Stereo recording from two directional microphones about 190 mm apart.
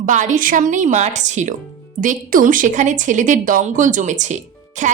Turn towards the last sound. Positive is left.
turn(degrees=-40)  # may be behind; listen again after turning